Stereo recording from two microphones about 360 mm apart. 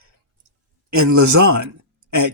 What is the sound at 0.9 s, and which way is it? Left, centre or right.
Speech, right.